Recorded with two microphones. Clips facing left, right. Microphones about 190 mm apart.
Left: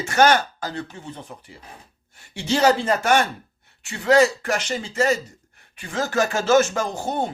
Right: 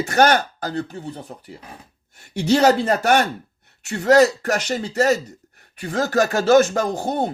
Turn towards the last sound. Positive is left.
turn(degrees=-35)  # may be behind; listen again after turning